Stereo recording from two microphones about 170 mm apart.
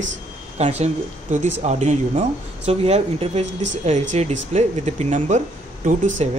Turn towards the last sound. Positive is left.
turn(degrees=-45)  # may be behind; listen again after turning